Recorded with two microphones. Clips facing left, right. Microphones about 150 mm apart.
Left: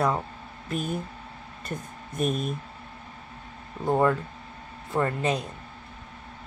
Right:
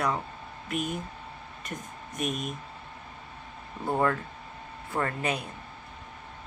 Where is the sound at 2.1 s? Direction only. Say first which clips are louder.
Left 5 dB; 30° left (ahead or behind).